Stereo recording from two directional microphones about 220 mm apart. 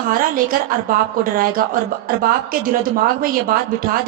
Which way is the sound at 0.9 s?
40° right (ahead or behind).